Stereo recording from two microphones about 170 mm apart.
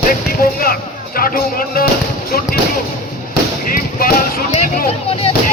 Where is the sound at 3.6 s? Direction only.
60° left (ahead or behind).